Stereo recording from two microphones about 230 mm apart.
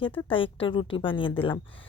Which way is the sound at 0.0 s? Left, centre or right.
Left.